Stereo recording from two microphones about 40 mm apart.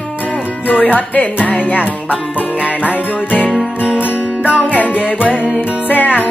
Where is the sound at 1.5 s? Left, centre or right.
Left.